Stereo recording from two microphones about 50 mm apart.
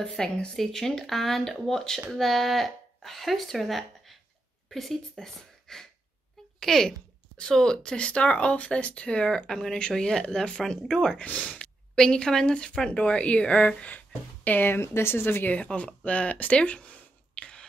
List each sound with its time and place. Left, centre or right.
0.0 s a woman's voice: centre; by 15.5 s left
15.5 s speech: left
17.4 s chewing: centre